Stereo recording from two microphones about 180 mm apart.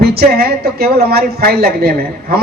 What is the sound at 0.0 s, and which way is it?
A woman's voice, 60° right (ahead or behind).